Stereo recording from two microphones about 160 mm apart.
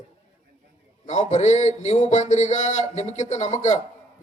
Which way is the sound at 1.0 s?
45° left (ahead or behind).